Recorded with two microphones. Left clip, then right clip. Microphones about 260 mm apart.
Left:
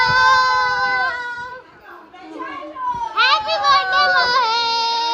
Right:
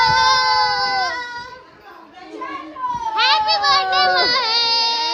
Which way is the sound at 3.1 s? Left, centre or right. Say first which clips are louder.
Even; centre.